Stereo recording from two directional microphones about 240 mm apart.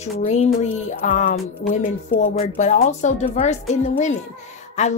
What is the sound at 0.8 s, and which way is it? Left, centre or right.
Music, left.